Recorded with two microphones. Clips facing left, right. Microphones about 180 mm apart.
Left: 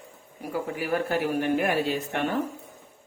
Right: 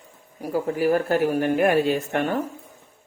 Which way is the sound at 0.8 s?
40° right (ahead or behind).